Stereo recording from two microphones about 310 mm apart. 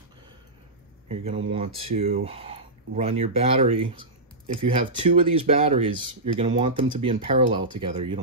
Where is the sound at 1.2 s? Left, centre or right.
Centre.